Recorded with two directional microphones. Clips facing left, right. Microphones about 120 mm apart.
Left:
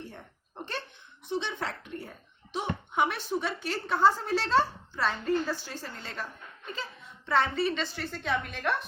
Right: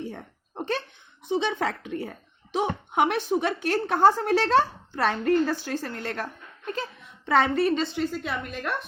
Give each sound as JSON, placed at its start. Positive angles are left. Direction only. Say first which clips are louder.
{"t": 0.0, "sound": "a sound", "louder": "right 8 dB", "side_deg": -80}
{"t": 1.4, "sound": "speech", "louder": "right 8 dB", "side_deg": -90}
{"t": 2.6, "sound": "speech", "louder": "right 5 dB", "side_deg": -65}
{"t": 7.3, "sound": "speech", "louder": "right 5 dB", "side_deg": -90}
{"t": 7.5, "sound": "a woman's voice", "louder": "right 6 dB", "side_deg": -50}
{"t": 7.9, "sound": "a woman's voice", "louder": "right 3 dB", "side_deg": -5}